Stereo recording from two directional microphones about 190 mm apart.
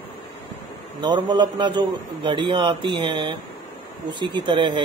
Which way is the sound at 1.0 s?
25° right (ahead or behind).